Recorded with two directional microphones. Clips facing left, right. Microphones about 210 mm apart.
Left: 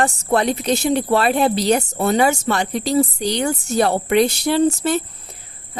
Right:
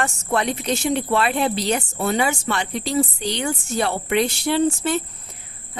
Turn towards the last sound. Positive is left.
turn(degrees=40)  # may be behind; listen again after turning